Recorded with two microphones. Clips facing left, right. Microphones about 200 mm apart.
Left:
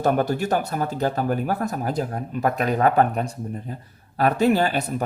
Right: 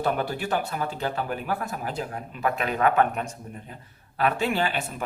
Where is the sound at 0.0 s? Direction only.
45° left (ahead or behind).